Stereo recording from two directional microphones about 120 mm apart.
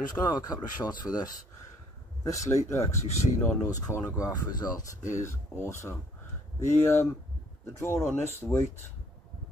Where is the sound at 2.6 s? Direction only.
25° left (ahead or behind).